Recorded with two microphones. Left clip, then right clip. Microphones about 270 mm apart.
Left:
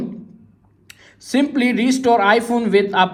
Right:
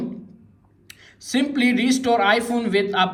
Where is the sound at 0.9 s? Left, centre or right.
Centre.